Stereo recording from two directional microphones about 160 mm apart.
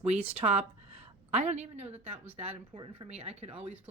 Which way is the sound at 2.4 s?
35° right (ahead or behind).